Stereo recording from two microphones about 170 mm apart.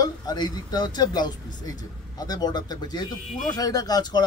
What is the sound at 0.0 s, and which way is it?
Speech, 25° left (ahead or behind).